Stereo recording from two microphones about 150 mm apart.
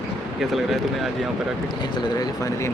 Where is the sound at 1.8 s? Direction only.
30° left (ahead or behind).